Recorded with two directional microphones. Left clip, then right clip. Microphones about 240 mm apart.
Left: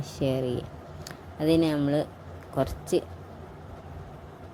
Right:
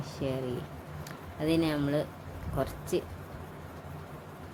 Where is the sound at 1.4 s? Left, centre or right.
Centre.